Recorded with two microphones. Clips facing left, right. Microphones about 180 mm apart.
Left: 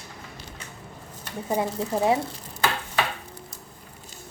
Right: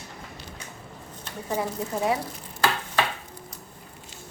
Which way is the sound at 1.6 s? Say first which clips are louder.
Left 3 dB; 25° left (ahead or behind).